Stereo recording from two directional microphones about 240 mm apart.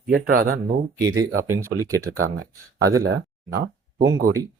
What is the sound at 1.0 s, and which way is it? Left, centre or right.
Speech, centre.